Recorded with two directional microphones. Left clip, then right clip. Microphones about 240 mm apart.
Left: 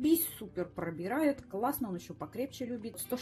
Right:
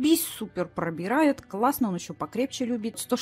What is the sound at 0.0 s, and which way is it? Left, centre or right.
A woman's voice, right.